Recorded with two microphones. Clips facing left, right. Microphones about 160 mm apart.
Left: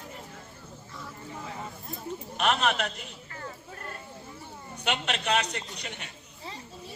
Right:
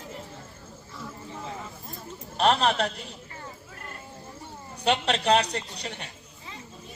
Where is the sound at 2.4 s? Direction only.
35° right (ahead or behind).